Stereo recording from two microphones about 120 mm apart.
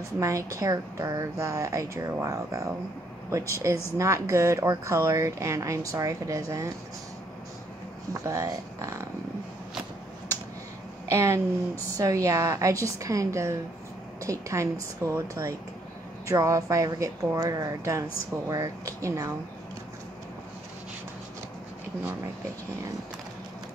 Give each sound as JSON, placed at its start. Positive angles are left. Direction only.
{"t": 0.2, "sound": "speech", "side_deg": -25}
{"t": 8.1, "sound": "speech", "side_deg": -25}
{"t": 11.1, "sound": "speech", "side_deg": -25}